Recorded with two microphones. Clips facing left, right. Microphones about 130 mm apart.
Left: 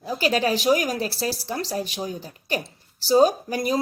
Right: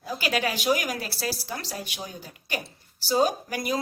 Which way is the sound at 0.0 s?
35° left (ahead or behind).